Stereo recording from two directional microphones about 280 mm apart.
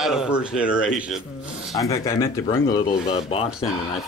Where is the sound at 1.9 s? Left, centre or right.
Centre.